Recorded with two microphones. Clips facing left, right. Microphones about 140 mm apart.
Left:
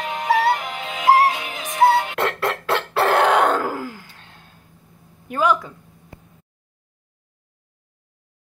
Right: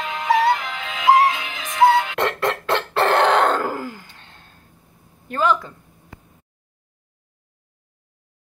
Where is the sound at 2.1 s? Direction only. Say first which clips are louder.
Right 1 dB; 5° left (ahead or behind).